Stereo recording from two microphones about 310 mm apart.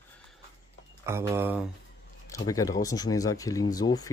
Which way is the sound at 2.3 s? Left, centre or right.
Centre.